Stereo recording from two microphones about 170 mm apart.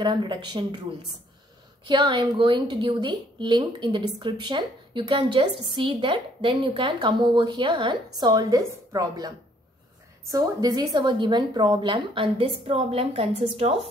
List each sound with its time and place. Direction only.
0.0 s a woman's voice: 30° right (ahead or behind)
10.3 s a woman's voice: 20° right (ahead or behind); by 13.7 s 35° right (ahead or behind)